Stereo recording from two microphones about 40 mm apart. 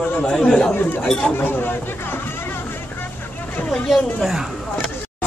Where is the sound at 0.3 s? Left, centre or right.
Centre.